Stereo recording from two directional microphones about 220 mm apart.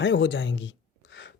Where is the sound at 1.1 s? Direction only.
50° left (ahead or behind).